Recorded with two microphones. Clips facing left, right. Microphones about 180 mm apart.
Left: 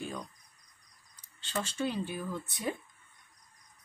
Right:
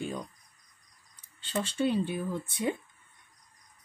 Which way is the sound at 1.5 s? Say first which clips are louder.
Right 5 dB; 30° right (ahead or behind).